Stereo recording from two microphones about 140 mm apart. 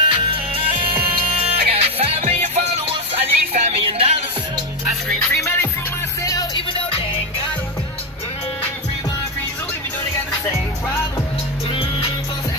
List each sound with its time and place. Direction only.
0.1 s music: 40° right (ahead or behind)
5.3 s music: 15° left (ahead or behind)
11.7 s music: 40° left (ahead or behind)